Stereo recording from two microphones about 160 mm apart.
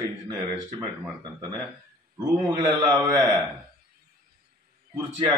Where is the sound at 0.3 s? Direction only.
20° right (ahead or behind).